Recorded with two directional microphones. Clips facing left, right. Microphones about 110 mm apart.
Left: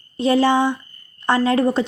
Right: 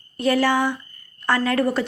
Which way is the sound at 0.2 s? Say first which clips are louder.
Left 3 dB; 20° left (ahead or behind).